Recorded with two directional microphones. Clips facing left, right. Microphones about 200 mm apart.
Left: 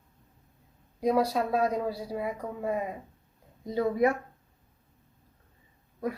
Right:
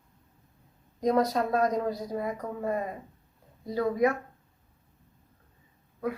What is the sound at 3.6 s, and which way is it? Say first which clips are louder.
Speech: even; 20° left (ahead or behind).